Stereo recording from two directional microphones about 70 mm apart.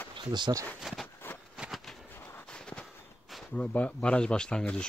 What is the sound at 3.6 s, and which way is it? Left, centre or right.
Speech, centre.